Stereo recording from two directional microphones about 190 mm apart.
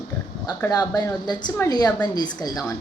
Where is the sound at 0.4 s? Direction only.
20° left (ahead or behind).